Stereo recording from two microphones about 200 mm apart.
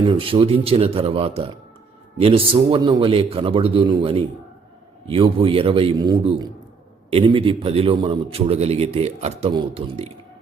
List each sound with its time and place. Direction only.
0.0 s a man's voice: 25° right (ahead or behind)